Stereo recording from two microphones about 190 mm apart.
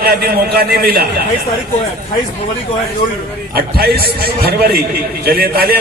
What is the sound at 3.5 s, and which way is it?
A man's voice, 55° right (ahead or behind).